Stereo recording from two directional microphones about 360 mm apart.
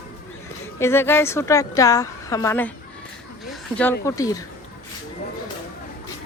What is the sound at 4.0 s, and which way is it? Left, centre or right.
Speech, centre.